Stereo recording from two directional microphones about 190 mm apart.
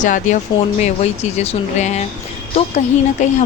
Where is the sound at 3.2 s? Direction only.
40° left (ahead or behind).